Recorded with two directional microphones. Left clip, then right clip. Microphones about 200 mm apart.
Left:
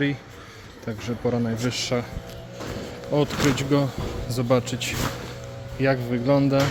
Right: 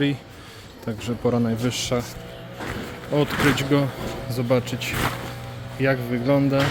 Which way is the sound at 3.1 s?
Centre (ahead or behind).